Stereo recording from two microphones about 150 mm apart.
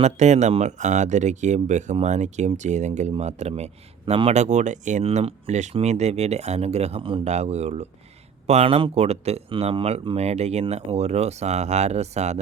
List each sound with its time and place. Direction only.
0.0 s speech: 50° right (ahead or behind)